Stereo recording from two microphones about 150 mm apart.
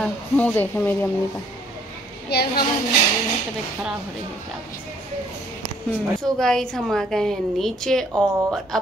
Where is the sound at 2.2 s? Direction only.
90° left.